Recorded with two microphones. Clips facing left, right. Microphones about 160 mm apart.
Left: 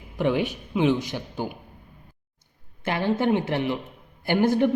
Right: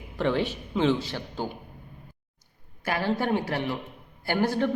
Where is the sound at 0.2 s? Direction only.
15° left (ahead or behind).